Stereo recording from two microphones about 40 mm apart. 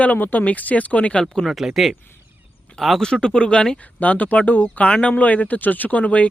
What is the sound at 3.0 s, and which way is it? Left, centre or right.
Speech, centre.